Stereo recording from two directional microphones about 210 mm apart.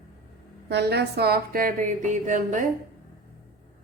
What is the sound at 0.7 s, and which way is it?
A woman's voice, 50° right (ahead or behind).